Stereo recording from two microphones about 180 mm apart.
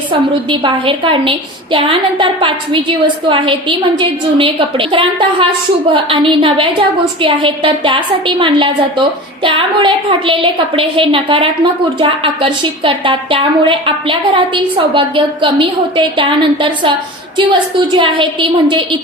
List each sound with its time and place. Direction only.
0.1 s a woman's voice: 30° right (ahead or behind)